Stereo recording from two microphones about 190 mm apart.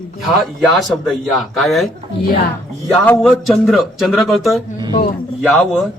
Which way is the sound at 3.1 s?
Centre (ahead or behind).